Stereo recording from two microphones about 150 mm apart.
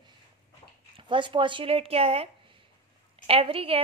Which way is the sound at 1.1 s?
35° right (ahead or behind).